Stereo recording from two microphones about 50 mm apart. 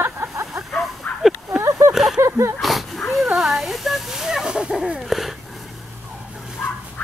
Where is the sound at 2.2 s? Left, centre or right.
Right.